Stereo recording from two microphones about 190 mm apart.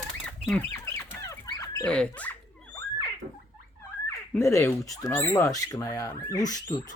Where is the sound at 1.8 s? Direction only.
5° left (ahead or behind).